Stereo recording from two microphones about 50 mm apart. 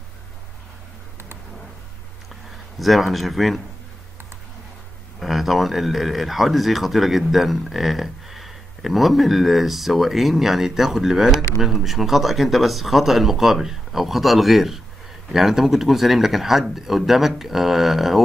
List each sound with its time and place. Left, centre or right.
2.8 s speech: centre
5.2 s speech: centre